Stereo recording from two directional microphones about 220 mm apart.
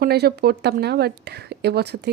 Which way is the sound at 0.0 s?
45° right (ahead or behind).